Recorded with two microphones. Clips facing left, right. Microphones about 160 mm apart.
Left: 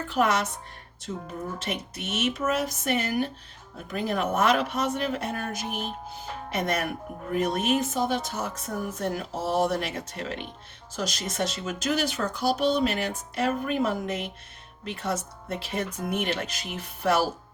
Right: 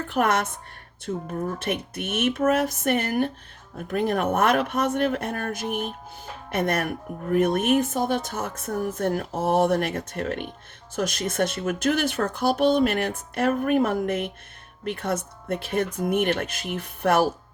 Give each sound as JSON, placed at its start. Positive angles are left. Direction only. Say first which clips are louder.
{"t": 0.1, "sound": "speech", "louder": "right 1 dB", "side_deg": -55}